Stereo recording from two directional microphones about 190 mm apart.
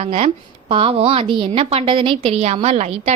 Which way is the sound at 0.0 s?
30° right (ahead or behind).